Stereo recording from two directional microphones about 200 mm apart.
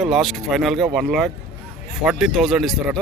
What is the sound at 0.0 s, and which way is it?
Speech, centre (ahead or behind).